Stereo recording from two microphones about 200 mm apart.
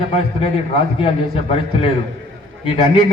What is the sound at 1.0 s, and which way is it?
A man's voice, 30° left (ahead or behind).